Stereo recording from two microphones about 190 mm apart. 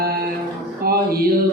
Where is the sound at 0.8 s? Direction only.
50° right (ahead or behind).